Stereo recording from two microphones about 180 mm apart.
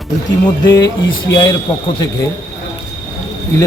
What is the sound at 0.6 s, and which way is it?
Speech, 20° left (ahead or behind).